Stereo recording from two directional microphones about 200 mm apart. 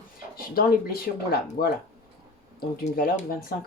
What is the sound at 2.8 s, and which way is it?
Speech, 40° left (ahead or behind).